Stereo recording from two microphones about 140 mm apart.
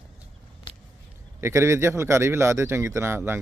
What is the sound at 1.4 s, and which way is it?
Speech, 20° right (ahead or behind).